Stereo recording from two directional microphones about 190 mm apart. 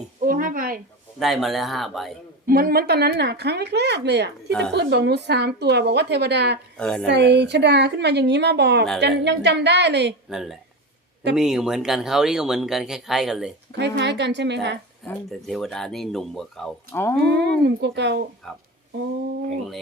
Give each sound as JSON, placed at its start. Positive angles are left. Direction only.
{"t": 0.2, "sound": "a sound", "side_deg": -45}
{"t": 1.2, "sound": "speech", "side_deg": 0}
{"t": 2.5, "sound": "a woman's voice", "side_deg": -50}
{"t": 6.7, "sound": "speech", "side_deg": 5}
{"t": 7.1, "sound": "a woman's voice", "side_deg": -60}
{"t": 10.2, "sound": "speech", "side_deg": -5}
{"t": 13.7, "sound": "a woman's voice", "side_deg": -65}
{"t": 15.0, "sound": "speech", "side_deg": 0}
{"t": 16.9, "sound": "speech", "side_deg": 15}
{"t": 17.2, "sound": "a woman's voice", "side_deg": -60}